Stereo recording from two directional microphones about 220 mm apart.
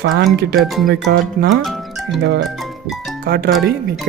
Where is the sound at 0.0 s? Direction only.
45° right (ahead or behind).